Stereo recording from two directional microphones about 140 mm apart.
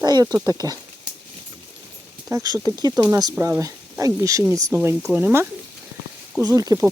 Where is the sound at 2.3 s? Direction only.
25° right (ahead or behind).